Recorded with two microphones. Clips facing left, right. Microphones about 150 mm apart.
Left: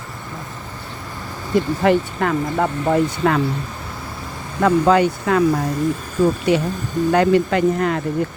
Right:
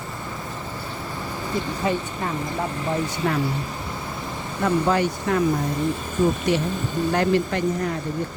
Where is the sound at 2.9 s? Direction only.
90° left.